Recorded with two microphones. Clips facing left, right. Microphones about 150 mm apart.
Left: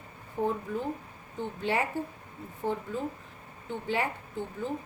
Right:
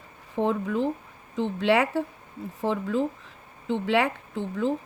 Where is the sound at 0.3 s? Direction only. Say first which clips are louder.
Right 5 dB; 85° right.